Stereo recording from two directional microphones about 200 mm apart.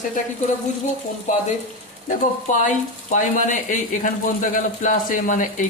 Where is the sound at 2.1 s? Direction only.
40° left (ahead or behind).